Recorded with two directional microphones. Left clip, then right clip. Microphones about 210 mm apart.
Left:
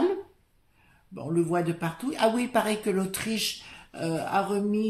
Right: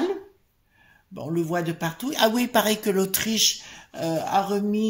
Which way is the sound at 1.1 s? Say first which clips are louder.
Even; 35° right (ahead or behind).